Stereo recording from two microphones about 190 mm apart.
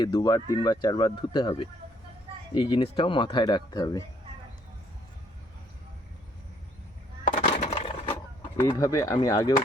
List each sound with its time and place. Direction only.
0.0 s speech: 25° left (ahead or behind)
7.5 s a sound: 30° left (ahead or behind)
8.4 s speech: 15° left (ahead or behind)